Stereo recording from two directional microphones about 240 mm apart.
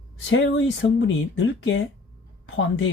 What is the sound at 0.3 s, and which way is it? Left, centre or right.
Speech, left.